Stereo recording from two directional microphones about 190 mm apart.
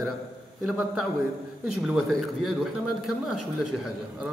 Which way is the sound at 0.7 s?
5° right (ahead or behind).